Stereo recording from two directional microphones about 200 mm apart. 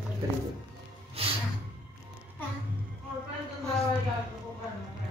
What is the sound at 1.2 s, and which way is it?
Music, 30° right (ahead or behind).